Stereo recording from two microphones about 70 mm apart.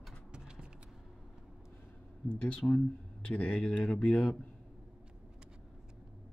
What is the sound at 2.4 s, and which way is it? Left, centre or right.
Speech, centre.